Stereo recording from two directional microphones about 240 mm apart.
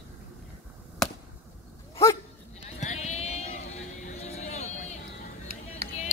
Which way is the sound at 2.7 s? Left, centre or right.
Left.